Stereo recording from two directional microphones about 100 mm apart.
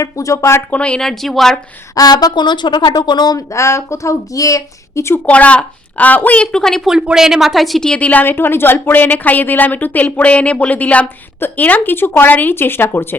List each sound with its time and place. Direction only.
0.0 s a woman's voice: 35° left (ahead or behind)
0.7 s speech: 10° left (ahead or behind)
2.0 s speech: 40° left (ahead or behind)
3.5 s a woman's voice: 30° left (ahead or behind)
5.2 s a woman's voice: 15° left (ahead or behind)
6.8 s a woman's voice: 5° right (ahead or behind); by 13.1 s 20° left (ahead or behind)